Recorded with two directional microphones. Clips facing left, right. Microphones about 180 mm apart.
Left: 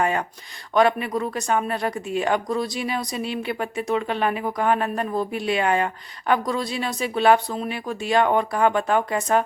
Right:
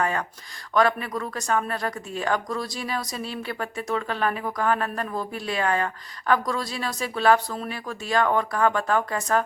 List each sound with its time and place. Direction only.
0.0 s speech: 25° left (ahead or behind)